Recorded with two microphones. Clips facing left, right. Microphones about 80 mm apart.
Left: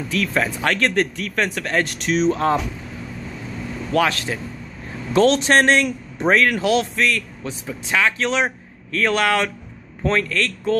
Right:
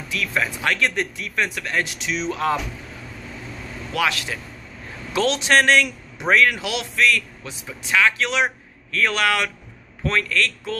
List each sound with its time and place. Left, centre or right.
0.1 s speech: left
2.2 s a man's voice: left
3.9 s a man's voice: left